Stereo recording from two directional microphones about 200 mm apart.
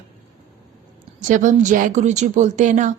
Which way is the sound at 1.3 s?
40° right (ahead or behind).